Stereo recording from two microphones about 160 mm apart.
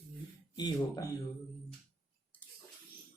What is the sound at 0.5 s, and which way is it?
Speech, 25° left (ahead or behind).